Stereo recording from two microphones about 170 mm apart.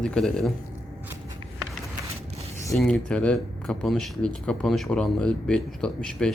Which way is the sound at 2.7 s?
5° left (ahead or behind).